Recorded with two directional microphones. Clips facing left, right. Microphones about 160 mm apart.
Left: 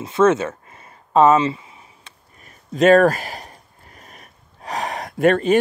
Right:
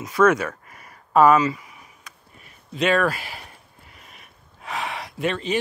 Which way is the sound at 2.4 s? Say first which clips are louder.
Left 8 dB; 45° left (ahead or behind).